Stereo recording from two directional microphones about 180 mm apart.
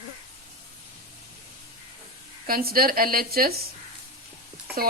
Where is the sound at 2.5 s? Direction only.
55° right (ahead or behind).